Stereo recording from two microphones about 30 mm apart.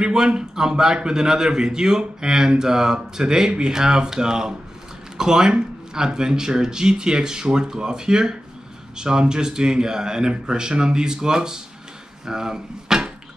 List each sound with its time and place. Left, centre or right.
0.0 s speech: right